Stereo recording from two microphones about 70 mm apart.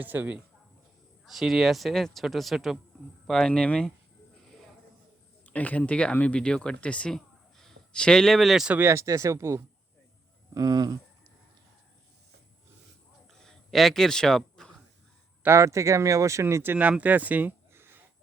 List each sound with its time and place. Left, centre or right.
0.0 s speech: right
1.2 s speech: centre
5.5 s speech: left; by 8.6 s centre
8.8 s speech: right
10.5 s speech: right
13.4 s a sound: centre
15.4 s speech: right
17.0 s speech: right
17.7 s a sound: right